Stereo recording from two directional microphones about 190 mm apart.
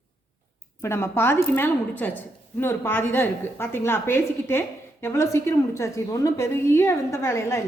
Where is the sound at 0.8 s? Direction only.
15° left (ahead or behind).